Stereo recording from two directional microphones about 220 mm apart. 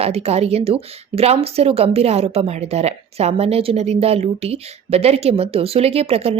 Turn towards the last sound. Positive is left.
turn(degrees=-25)  # may be behind; listen again after turning